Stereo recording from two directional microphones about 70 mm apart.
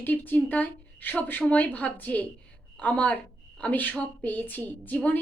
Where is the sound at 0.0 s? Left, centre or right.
Left.